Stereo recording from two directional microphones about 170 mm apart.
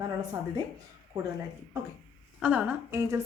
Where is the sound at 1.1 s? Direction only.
25° right (ahead or behind).